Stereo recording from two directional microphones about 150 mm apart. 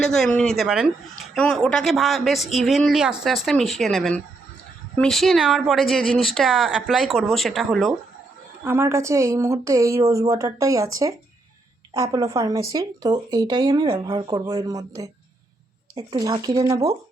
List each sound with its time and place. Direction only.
0.0 s speech: 5° left (ahead or behind)
8.6 s a woman's voice: 15° right (ahead or behind)
12.0 s a woman's voice: 40° right (ahead or behind)
12.3 s a woman's voice: 20° right (ahead or behind)
16.1 s a woman's voice: 25° right (ahead or behind)